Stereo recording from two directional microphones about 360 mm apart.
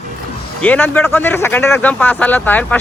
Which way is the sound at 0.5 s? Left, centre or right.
Centre.